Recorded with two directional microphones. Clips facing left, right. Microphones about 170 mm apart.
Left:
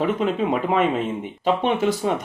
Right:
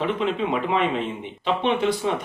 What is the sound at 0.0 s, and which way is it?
Speech, 45° left (ahead or behind).